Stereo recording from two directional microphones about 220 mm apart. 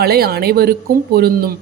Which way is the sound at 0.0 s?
45° right (ahead or behind).